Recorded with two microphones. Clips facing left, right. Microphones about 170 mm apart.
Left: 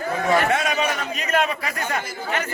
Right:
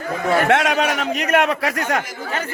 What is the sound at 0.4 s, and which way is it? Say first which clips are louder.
A man's voice: right 4 dB; 85° right.